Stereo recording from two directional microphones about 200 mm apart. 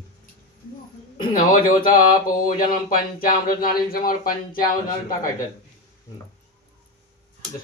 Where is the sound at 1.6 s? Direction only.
45° left (ahead or behind).